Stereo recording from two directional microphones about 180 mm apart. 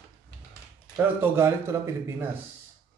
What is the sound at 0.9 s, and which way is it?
Speech, 10° right (ahead or behind).